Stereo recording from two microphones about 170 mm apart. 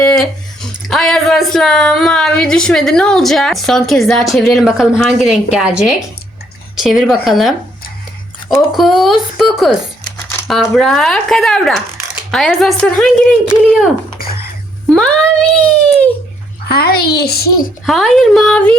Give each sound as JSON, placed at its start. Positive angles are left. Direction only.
{"t": 0.0, "sound": "a woman's voice", "side_deg": 5}
{"t": 8.7, "sound": "speech", "side_deg": 0}
{"t": 14.9, "sound": "speech", "side_deg": 5}
{"t": 16.6, "sound": "a child's voice", "side_deg": 65}
{"t": 17.8, "sound": "speech", "side_deg": 0}